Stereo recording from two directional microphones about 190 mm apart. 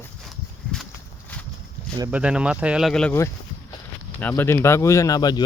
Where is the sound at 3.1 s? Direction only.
15° left (ahead or behind).